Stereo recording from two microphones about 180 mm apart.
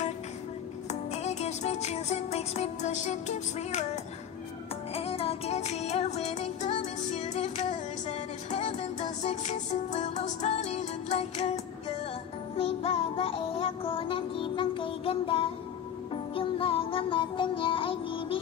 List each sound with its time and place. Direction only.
0.8 s music: 40° left (ahead or behind)